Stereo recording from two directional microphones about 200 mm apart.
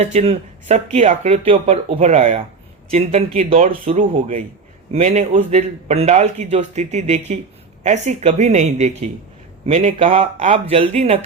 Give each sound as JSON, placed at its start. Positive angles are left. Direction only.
{"t": 0.0, "sound": "a man's voice", "side_deg": -30}